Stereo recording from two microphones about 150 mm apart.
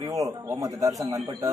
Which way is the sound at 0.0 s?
20° right (ahead or behind).